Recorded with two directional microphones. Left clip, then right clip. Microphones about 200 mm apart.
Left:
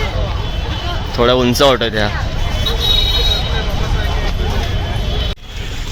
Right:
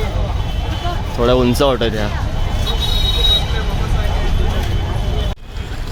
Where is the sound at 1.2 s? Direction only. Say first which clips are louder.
Left 3 dB; centre (ahead or behind).